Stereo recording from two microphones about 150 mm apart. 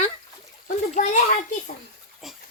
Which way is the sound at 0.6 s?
55° left (ahead or behind).